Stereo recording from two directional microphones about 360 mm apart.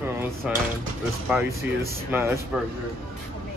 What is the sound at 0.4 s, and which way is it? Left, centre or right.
Speech, centre.